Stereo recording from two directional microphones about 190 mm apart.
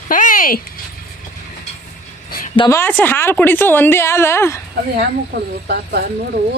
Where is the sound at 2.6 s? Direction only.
10° left (ahead or behind).